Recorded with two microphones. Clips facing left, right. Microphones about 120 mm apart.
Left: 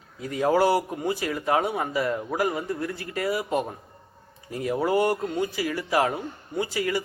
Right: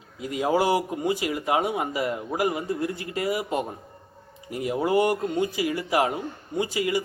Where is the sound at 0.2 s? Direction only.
15° right (ahead or behind).